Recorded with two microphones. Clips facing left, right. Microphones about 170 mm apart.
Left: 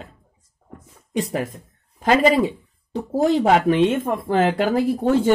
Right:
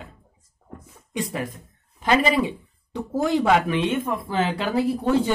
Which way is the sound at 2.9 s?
35° left (ahead or behind).